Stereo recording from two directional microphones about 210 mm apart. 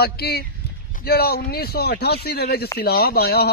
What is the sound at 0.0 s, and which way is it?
Speech, 50° left (ahead or behind).